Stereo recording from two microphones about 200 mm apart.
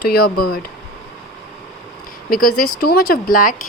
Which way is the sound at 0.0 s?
50° left (ahead or behind).